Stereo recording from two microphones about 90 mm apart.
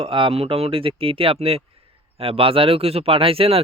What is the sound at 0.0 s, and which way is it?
Speech, 80° right.